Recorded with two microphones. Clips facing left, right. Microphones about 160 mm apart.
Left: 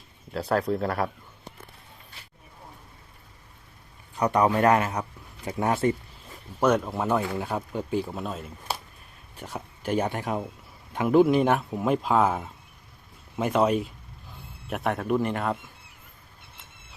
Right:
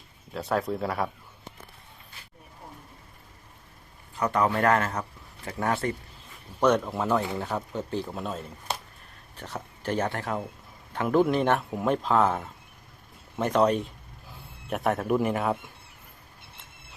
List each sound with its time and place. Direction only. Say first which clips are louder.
0.3 s speech: left 3 dB; centre (ahead or behind)
4.2 s speech: left 3 dB; 15° left (ahead or behind)
6.6 s speech: even; 10° left (ahead or behind)